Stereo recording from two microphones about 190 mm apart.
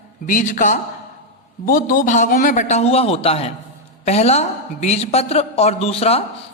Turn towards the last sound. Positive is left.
turn(degrees=30)  # may be behind; listen again after turning